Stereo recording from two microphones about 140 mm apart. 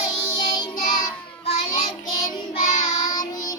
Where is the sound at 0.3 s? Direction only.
30° left (ahead or behind).